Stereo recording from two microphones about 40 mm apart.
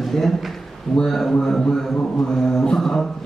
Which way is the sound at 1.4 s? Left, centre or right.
Centre.